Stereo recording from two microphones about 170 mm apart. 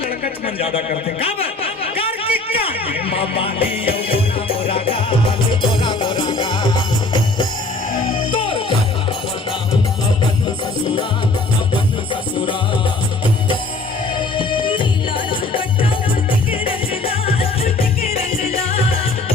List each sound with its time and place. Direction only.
0.6 s a sound: 35° left (ahead or behind)
3.1 s music: 35° left (ahead or behind)
14.3 s music: 30° left (ahead or behind)